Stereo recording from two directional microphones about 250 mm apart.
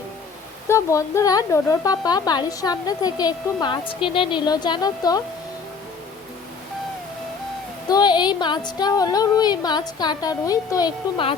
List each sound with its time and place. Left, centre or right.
0.7 s a woman's voice: centre
7.9 s a woman's voice: centre